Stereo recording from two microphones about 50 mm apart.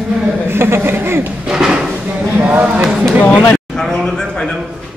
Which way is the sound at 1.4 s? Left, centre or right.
Centre.